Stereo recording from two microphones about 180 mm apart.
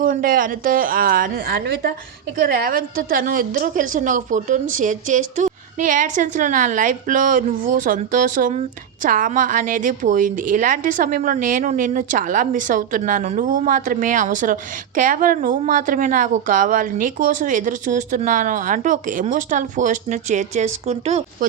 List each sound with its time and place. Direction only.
0.0 s a woman's voice: 50° right (ahead or behind)